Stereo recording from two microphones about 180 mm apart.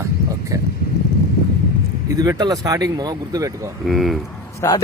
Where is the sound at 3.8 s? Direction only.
Centre (ahead or behind).